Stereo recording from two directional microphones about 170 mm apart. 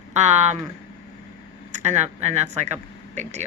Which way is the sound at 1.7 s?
45° right (ahead or behind).